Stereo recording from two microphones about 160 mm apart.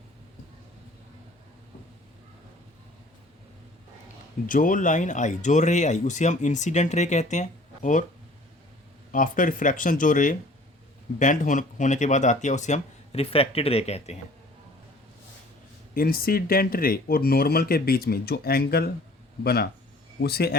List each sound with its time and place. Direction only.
4.4 s speech: 55° left (ahead or behind)
9.1 s speech: 55° left (ahead or behind)
16.0 s a man's voice: 65° left (ahead or behind)